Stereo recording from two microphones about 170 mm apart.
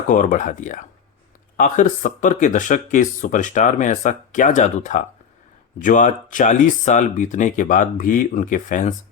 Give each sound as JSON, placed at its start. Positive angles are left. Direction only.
{"t": 0.1, "sound": "speech", "side_deg": 50}